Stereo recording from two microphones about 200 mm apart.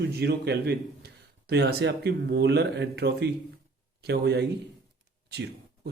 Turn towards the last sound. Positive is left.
turn(degrees=-55)  # may be behind; listen again after turning